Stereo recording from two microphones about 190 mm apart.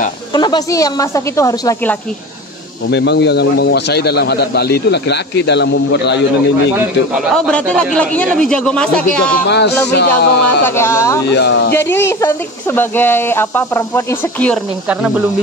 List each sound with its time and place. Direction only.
0.3 s speech: 25° left (ahead or behind)
2.9 s speech: 65° left (ahead or behind)
7.3 s a man's voice: 5° left (ahead or behind)
9.5 s speech: 65° left (ahead or behind)
10.6 s speech: 15° left (ahead or behind)
11.3 s speech: 65° left (ahead or behind)
11.7 s speech: 15° left (ahead or behind)
14.9 s a man's voice: 5° right (ahead or behind)